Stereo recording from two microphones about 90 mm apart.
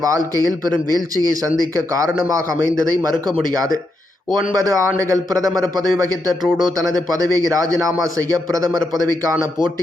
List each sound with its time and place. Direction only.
0.0 s speech: 40° right (ahead or behind)